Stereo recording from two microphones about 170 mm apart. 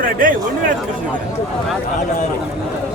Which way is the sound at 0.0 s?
55° right (ahead or behind).